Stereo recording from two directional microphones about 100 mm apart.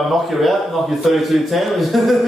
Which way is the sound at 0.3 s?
Centre (ahead or behind).